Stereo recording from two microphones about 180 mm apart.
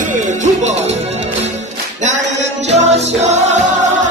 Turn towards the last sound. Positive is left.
turn(degrees=-40)  # may be behind; listen again after turning